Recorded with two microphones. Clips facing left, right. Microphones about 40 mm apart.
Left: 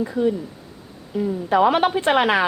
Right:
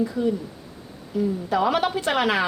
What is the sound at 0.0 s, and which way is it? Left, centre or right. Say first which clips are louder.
A woman's voice: left 2 dB; centre.